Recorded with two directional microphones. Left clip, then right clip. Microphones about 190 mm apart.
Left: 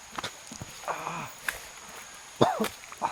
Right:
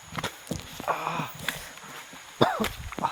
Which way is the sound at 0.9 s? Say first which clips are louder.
Right 5 dB; 55° right (ahead or behind).